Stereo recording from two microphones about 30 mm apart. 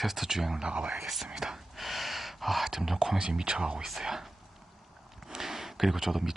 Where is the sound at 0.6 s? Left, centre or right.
Right.